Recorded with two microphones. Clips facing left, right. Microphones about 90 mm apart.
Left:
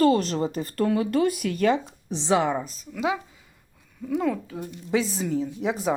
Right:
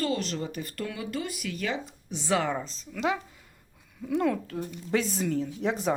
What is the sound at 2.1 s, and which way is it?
A woman's voice, 25° left (ahead or behind).